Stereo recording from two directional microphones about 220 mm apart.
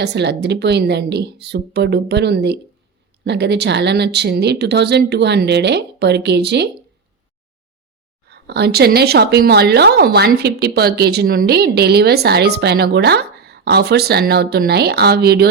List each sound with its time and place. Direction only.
0.0 s a woman's voice: 50° right (ahead or behind)
8.3 s a woman's voice: 50° right (ahead or behind)